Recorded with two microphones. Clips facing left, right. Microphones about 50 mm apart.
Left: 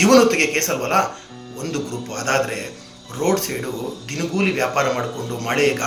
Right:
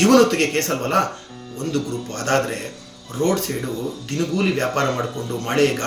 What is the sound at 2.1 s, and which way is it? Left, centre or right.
Speech, left.